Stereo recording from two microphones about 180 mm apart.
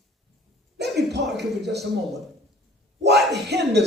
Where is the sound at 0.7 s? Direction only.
70° right (ahead or behind).